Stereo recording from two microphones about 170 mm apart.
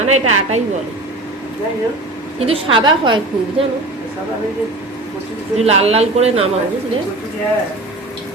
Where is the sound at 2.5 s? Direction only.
30° right (ahead or behind).